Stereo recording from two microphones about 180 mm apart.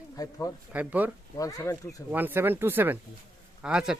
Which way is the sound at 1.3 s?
20° left (ahead or behind).